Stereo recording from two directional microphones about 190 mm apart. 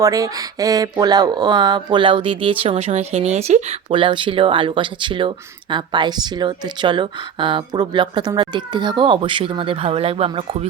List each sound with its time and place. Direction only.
0.0 s speech: 20° right (ahead or behind)